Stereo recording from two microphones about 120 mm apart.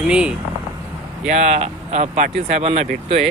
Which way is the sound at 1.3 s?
80° right.